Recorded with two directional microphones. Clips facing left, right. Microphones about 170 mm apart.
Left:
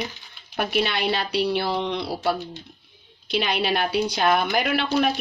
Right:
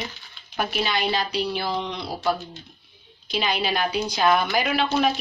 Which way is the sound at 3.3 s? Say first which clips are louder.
Left 2 dB; 65° left (ahead or behind).